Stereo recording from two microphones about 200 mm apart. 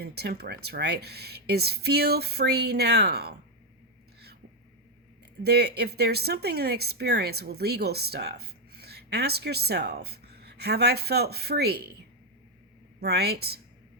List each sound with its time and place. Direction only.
0.0 s speech: 55° right (ahead or behind)
5.4 s speech: 55° right (ahead or behind)
13.0 s speech: 55° right (ahead or behind)